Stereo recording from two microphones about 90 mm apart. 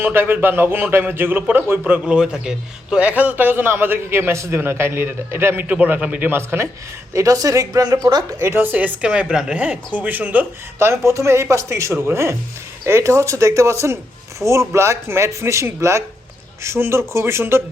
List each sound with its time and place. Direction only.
0.0 s a man's voice: 25° right (ahead or behind)
7.1 s speech: 35° right (ahead or behind)
8.4 s a man's voice: 25° right (ahead or behind)